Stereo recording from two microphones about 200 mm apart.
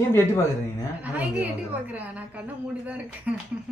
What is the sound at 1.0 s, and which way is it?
A woman's voice, 10° right (ahead or behind).